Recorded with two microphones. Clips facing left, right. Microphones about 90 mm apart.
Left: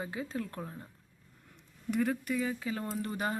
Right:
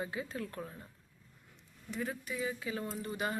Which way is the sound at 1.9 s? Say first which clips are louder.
Left 8 dB; 60° left (ahead or behind).